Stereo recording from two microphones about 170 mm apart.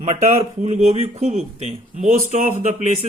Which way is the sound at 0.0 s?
40° right (ahead or behind).